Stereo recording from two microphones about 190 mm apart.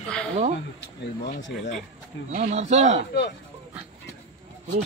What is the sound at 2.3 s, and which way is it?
Speech, 40° right (ahead or behind).